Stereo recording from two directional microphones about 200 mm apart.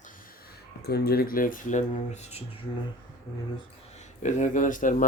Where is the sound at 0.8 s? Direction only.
55° left (ahead or behind); by 2.7 s 30° left (ahead or behind).